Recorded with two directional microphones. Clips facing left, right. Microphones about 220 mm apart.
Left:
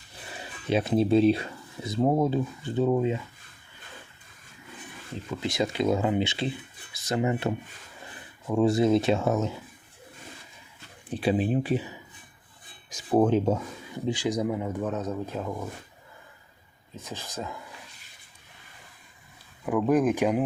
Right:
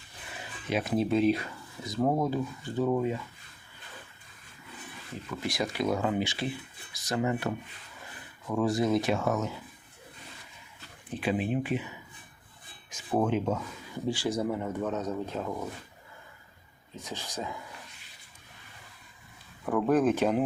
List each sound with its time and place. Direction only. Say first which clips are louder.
0.7 s speech: left 5 dB; 30° left (ahead or behind)
5.3 s speech: left 4 dB; 20° left (ahead or behind)
11.1 s speech: left 4 dB; 35° left (ahead or behind)
12.9 s speech: left 6 dB; 35° left (ahead or behind)
14.1 s speech: left 2 dB; 15° left (ahead or behind)
19.6 s speech: left 2 dB; 10° left (ahead or behind)